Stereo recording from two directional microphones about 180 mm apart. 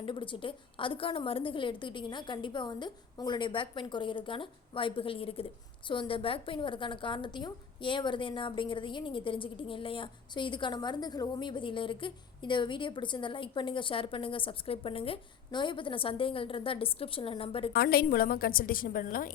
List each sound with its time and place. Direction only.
0.0 s a woman's voice: 30° left (ahead or behind)
17.7 s a woman's voice: 55° left (ahead or behind)